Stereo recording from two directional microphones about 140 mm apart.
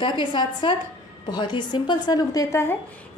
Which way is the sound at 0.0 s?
35° left (ahead or behind).